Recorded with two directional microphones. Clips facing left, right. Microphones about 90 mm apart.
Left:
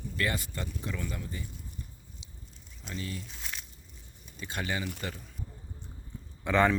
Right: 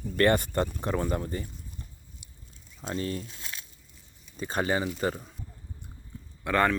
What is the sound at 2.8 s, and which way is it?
Speech, 40° right (ahead or behind).